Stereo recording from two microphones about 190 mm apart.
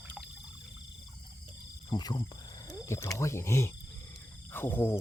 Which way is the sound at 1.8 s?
20° left (ahead or behind).